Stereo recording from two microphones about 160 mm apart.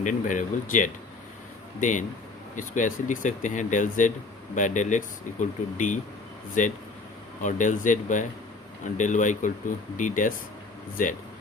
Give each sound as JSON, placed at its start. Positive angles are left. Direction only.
{"t": 0.0, "sound": "speech", "side_deg": 50}